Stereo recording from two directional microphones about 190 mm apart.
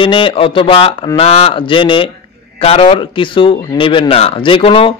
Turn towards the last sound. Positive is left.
turn(degrees=30)  # may be behind; listen again after turning